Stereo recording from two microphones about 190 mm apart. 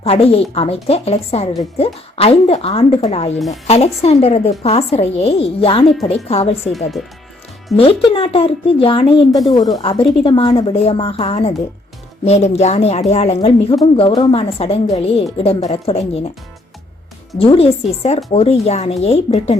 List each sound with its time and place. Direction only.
0.0 s speech: 30° left (ahead or behind)
3.3 s a woman's voice: centre (ahead or behind)
3.7 s speech: 35° left (ahead or behind)
7.8 s speech: 30° left (ahead or behind)
17.3 s speech: 30° left (ahead or behind)